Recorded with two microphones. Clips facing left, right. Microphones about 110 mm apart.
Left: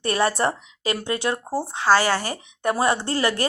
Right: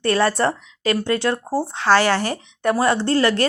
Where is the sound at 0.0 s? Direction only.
15° left (ahead or behind).